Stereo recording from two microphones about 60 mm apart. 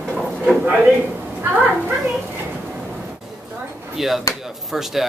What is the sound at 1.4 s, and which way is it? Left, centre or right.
Children playing, right.